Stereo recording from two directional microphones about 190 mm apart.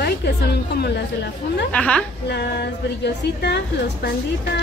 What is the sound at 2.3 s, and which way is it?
A woman's voice, 60° left (ahead or behind).